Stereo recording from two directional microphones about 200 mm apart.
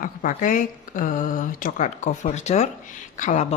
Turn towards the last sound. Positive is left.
turn(degrees=40)  # may be behind; listen again after turning